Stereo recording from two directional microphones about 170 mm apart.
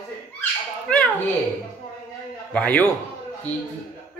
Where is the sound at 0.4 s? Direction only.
5° left (ahead or behind).